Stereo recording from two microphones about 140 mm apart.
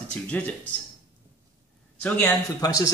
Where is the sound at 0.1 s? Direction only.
10° left (ahead or behind).